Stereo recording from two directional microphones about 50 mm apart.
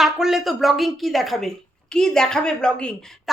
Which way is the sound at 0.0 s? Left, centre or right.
Centre.